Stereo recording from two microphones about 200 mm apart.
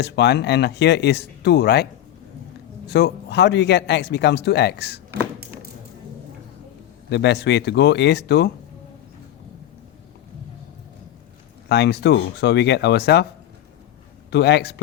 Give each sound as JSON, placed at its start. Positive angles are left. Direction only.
{"t": 0.0, "sound": "a man's voice", "side_deg": 60}
{"t": 7.1, "sound": "a man's voice", "side_deg": 60}
{"t": 11.7, "sound": "a man's voice", "side_deg": 55}
{"t": 14.3, "sound": "a man's voice", "side_deg": 55}